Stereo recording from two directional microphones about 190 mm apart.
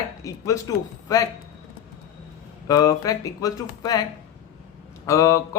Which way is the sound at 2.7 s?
20° left (ahead or behind).